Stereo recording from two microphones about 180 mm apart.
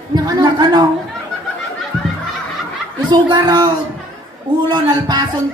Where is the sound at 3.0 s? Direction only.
25° right (ahead or behind).